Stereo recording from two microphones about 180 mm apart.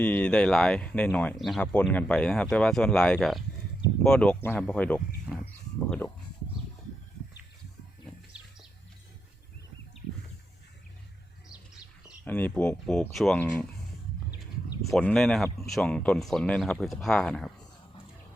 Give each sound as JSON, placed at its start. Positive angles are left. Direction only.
{"t": 0.0, "sound": "speech", "side_deg": 5}
{"t": 12.2, "sound": "speech", "side_deg": 10}
{"t": 14.3, "sound": "a sound", "side_deg": 20}
{"t": 14.9, "sound": "speech", "side_deg": 5}